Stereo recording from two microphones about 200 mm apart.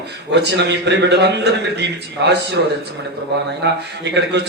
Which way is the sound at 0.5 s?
60° right (ahead or behind).